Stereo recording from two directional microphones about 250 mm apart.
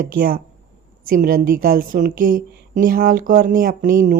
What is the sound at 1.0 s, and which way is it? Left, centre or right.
A woman's voice, right.